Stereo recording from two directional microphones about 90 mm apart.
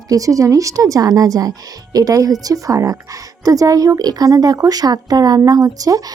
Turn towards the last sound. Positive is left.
turn(degrees=-40)  # may be behind; listen again after turning